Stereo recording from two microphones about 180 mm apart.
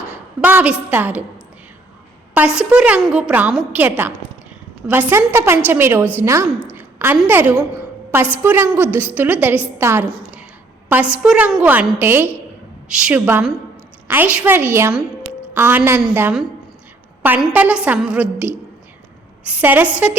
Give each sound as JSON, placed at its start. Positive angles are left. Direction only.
{"t": 0.4, "sound": "a woman's voice", "side_deg": -10}
{"t": 2.6, "sound": "a woman's voice", "side_deg": -5}
{"t": 6.7, "sound": "a sound", "side_deg": -10}
{"t": 7.3, "sound": "a woman's voice", "side_deg": -10}